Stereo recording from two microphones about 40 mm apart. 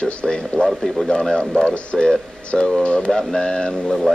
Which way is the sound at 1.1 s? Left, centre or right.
Left.